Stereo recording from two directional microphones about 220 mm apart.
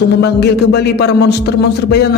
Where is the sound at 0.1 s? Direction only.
50° left (ahead or behind).